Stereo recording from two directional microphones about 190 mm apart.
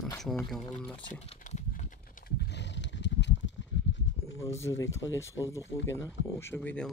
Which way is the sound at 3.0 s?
70° left (ahead or behind).